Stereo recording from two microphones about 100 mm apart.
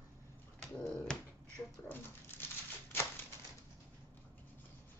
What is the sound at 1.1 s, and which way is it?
Finger snapping, 5° left (ahead or behind).